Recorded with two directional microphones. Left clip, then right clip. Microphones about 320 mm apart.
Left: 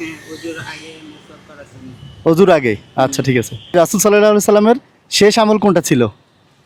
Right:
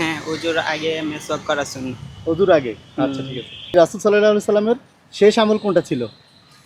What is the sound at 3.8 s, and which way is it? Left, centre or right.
Speech, left.